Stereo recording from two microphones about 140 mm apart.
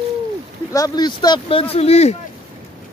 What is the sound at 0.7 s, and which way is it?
Speech, 30° left (ahead or behind).